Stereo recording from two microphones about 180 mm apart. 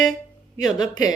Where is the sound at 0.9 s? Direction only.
20° left (ahead or behind).